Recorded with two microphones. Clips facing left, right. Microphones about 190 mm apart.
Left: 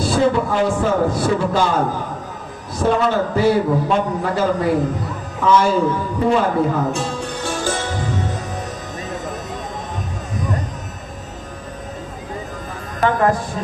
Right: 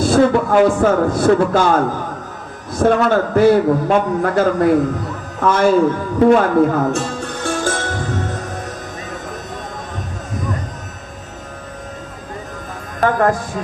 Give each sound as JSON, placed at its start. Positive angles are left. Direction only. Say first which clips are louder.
{"t": 0.0, "sound": "a man's voice", "louder": "right 4 dB", "side_deg": -50}
{"t": 6.1, "sound": "music", "louder": "right 7 dB", "side_deg": -55}
{"t": 13.0, "sound": "music", "louder": "right 2 dB", "side_deg": -50}